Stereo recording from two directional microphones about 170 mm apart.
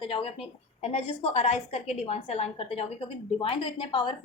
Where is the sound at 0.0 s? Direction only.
30° left (ahead or behind).